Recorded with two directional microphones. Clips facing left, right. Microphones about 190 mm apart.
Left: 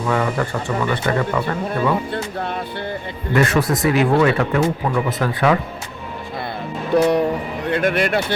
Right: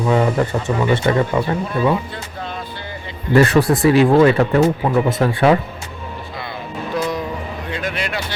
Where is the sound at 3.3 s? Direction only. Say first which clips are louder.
Right 4 dB; 30° right (ahead or behind).